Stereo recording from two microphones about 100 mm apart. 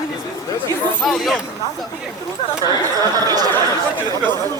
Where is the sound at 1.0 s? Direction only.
Centre (ahead or behind).